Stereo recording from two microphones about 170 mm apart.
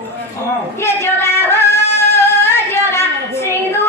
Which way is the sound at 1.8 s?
40° left (ahead or behind).